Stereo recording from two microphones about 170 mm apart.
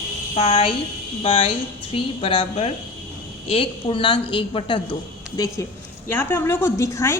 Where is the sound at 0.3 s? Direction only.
35° left (ahead or behind).